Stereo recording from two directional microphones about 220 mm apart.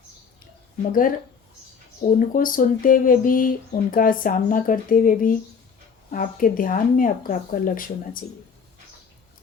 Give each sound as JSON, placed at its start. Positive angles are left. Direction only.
{"t": 0.8, "sound": "speech", "side_deg": 40}
{"t": 2.1, "sound": "speech", "side_deg": 40}